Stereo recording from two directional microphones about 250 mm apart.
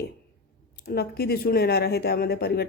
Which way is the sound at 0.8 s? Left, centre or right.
Left.